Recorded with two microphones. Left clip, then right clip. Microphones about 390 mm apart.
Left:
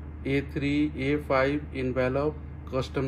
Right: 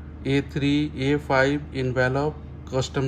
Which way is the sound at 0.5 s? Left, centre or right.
Right.